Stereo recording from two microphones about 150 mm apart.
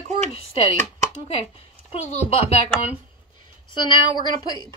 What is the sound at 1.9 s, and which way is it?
Speech, 40° left (ahead or behind).